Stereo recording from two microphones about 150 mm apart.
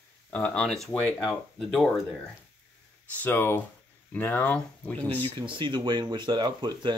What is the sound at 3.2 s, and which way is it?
Speech, 15° left (ahead or behind).